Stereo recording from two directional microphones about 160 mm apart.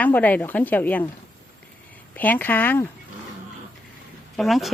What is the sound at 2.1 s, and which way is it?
Speech, 10° left (ahead or behind).